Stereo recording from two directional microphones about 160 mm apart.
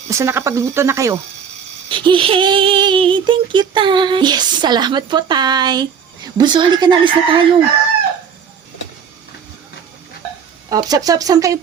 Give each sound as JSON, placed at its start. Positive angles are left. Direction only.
{"t": 0.1, "sound": "speech", "side_deg": -15}
{"t": 1.9, "sound": "speech", "side_deg": -30}
{"t": 10.7, "sound": "speech", "side_deg": -25}